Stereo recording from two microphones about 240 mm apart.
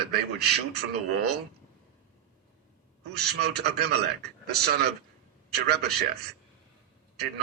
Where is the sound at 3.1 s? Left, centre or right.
Right.